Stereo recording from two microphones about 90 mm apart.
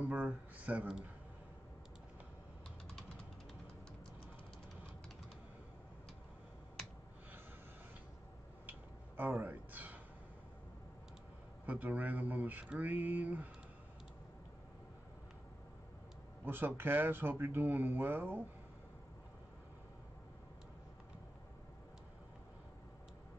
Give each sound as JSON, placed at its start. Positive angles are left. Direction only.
{"t": 0.1, "sound": "speech", "side_deg": -15}
{"t": 8.6, "sound": "a sound", "side_deg": -25}
{"t": 11.6, "sound": "speech", "side_deg": -20}
{"t": 16.4, "sound": "speech", "side_deg": -25}